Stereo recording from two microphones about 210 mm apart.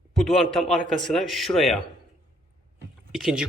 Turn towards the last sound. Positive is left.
turn(degrees=0)  # may be behind; listen again after turning